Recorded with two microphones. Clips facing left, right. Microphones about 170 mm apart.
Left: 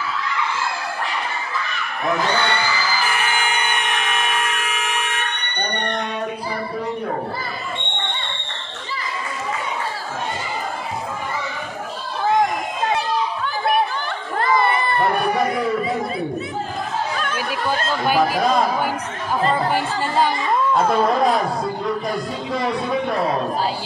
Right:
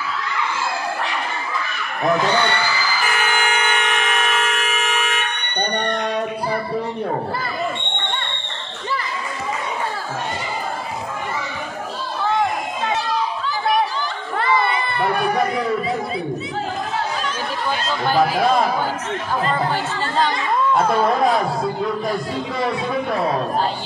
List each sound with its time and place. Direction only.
14.4 s crowd: 45° left (ahead or behind)
17.6 s speech: 10° left (ahead or behind)
19.5 s speech: 10° left (ahead or behind)
20.7 s speech: centre (ahead or behind)